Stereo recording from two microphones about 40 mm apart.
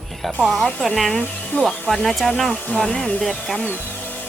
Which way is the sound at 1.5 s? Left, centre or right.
Left.